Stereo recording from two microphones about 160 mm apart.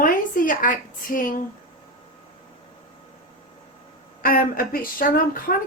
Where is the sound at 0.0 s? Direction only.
60° left (ahead or behind).